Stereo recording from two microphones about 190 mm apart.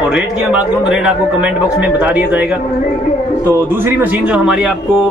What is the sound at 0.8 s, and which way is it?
A man's voice, 5° right (ahead or behind).